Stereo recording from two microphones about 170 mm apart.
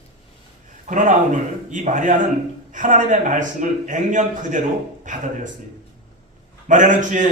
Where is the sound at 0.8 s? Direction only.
45° right (ahead or behind).